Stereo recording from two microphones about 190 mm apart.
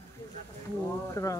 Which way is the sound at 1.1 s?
15° left (ahead or behind).